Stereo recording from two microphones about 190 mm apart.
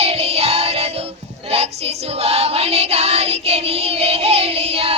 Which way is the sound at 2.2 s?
35° right (ahead or behind).